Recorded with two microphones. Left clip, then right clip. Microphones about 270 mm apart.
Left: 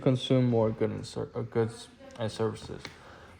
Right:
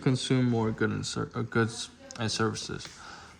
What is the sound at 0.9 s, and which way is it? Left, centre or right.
A man's voice, right.